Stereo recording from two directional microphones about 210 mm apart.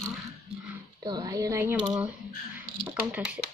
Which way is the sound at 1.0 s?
20° right (ahead or behind).